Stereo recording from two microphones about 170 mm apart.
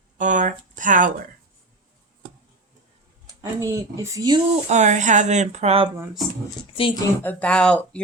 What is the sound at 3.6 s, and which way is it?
Speech, 20° right (ahead or behind).